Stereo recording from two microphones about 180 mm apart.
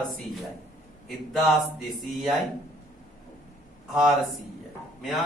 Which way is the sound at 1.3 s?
5° right (ahead or behind).